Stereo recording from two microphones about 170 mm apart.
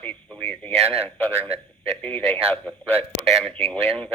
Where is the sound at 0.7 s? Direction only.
35° right (ahead or behind).